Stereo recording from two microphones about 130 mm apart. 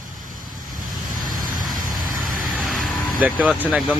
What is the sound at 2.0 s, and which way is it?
Vehicle, 90° right.